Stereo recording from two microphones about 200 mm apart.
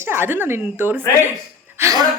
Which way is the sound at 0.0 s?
10° right (ahead or behind).